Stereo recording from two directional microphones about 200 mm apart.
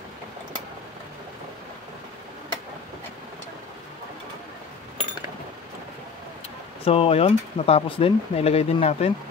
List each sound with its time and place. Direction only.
6.8 s speech: 30° left (ahead or behind)